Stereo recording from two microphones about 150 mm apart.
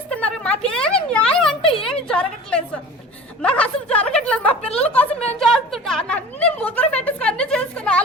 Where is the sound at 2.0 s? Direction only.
5° left (ahead or behind).